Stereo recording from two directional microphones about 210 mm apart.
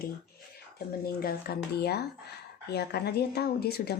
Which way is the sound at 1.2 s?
50° left (ahead or behind).